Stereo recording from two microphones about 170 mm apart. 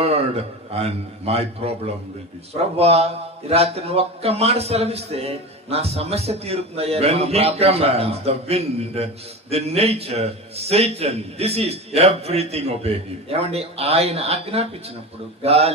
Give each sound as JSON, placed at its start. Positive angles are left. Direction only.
{"t": 0.0, "sound": "a man's voice", "side_deg": -35}